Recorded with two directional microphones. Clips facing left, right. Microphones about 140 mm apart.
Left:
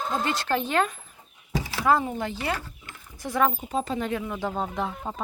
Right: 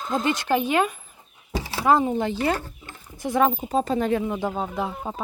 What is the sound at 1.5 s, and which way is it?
Speech, 30° right (ahead or behind).